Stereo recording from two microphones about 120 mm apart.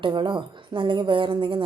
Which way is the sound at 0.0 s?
40° right (ahead or behind).